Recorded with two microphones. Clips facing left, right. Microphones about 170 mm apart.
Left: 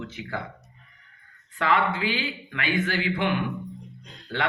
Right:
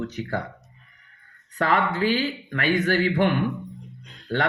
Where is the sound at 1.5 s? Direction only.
40° right (ahead or behind).